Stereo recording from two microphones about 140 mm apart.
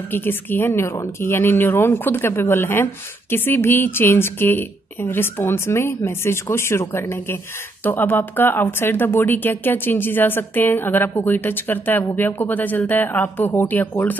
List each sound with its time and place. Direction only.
0.1 s speech: 15° left (ahead or behind)